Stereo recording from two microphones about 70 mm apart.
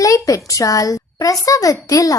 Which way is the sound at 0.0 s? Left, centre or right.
Left.